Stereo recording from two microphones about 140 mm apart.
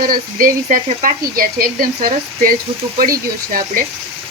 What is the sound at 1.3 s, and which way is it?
A woman's voice, 90° right.